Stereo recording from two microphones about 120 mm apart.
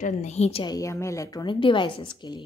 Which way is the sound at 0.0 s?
70° left (ahead or behind).